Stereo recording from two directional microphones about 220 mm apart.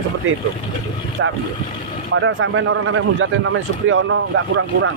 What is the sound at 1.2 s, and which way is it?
A man's voice, 60° right (ahead or behind).